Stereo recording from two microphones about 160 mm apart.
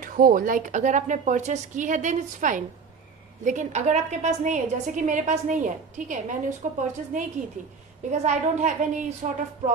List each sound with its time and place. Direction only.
0.0 s a woman's voice: 60° right (ahead or behind); by 9.4 s 45° right (ahead or behind)